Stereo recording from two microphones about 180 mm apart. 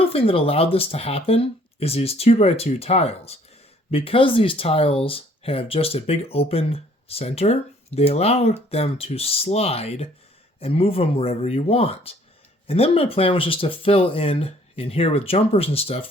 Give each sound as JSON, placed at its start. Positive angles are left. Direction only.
{"t": 0.0, "sound": "speech", "side_deg": 30}